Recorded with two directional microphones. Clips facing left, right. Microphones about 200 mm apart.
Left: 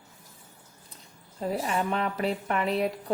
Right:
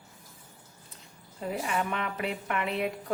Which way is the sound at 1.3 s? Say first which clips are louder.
Left 3 dB; 35° left (ahead or behind).